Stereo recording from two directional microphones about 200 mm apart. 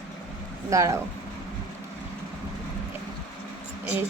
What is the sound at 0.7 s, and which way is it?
Speech, 15° right (ahead or behind).